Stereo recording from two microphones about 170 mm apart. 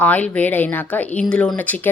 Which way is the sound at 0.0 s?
10° left (ahead or behind).